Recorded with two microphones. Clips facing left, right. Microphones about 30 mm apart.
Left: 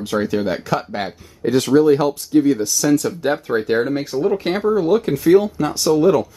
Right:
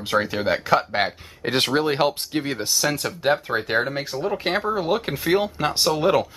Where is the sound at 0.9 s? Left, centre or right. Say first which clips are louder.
Right 2 dB; right.